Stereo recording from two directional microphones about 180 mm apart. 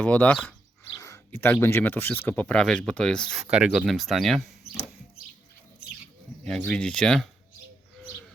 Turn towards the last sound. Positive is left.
turn(degrees=5)  # may be behind; listen again after turning